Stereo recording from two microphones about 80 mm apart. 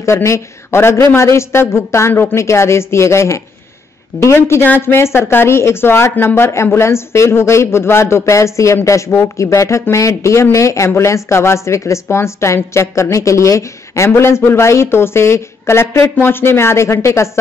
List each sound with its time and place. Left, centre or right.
0.0 s a woman's voice: left